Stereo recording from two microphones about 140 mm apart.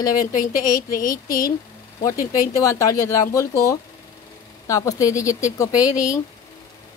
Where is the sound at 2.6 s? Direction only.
20° left (ahead or behind).